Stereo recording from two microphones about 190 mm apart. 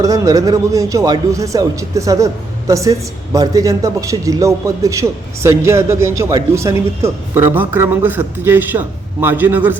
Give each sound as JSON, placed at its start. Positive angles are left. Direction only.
{"t": 0.0, "sound": "speech", "side_deg": -20}